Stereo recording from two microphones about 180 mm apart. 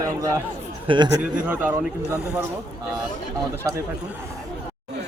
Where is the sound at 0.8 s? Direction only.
25° right (ahead or behind).